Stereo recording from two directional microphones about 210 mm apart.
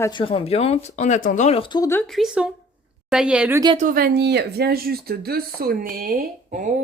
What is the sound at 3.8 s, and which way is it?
Speech, 40° right (ahead or behind).